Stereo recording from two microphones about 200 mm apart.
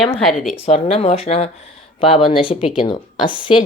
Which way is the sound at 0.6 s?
30° left (ahead or behind).